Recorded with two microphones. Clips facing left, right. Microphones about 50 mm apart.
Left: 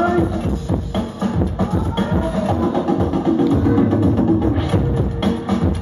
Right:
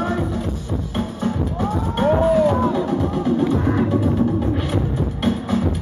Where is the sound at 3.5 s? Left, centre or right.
Right.